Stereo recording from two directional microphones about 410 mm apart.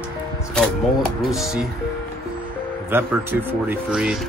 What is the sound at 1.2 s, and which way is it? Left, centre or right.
Speech, centre.